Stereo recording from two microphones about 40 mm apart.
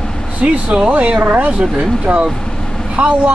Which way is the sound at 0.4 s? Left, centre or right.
Right.